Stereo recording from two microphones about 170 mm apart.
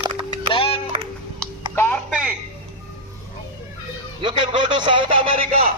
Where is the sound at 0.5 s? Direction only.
30° left (ahead or behind).